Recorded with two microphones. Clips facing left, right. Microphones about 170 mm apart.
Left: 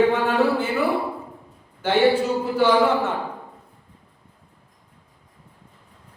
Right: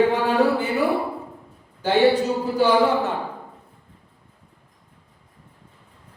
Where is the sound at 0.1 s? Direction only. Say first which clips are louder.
Right 1 dB; 15° right (ahead or behind).